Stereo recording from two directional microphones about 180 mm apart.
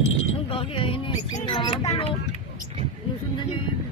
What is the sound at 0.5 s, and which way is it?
Speech, 30° left (ahead or behind).